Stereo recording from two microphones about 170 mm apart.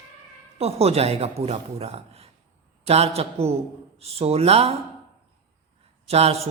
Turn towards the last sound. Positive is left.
turn(degrees=-35)  # may be behind; listen again after turning